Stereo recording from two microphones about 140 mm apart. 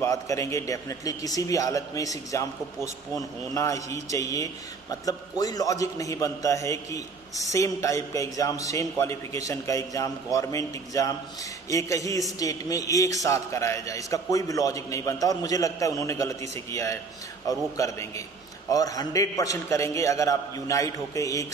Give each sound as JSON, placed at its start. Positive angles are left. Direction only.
{"t": 0.0, "sound": "a man's voice", "side_deg": 20}